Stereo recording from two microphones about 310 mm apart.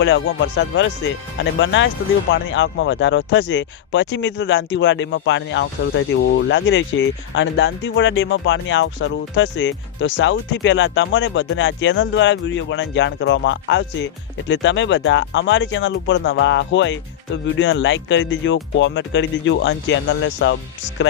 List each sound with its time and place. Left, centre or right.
0.0 s speech: left